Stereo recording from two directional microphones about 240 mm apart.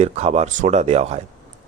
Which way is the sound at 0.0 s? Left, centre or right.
Right.